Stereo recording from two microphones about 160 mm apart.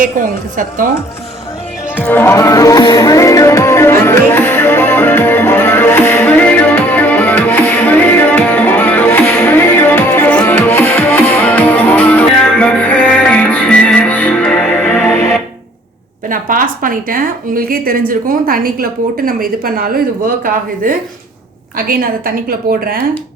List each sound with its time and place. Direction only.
0.0 s a woman's voice: 60° right (ahead or behind)
2.0 s music: 10° left (ahead or behind)
16.3 s a woman's voice: 60° right (ahead or behind)